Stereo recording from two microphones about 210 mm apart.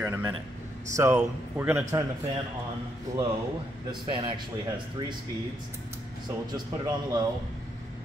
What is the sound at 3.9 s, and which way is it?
Speech, 25° right (ahead or behind).